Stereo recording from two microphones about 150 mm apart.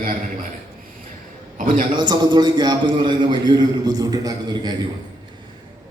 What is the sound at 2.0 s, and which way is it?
A man's voice, 30° right (ahead or behind).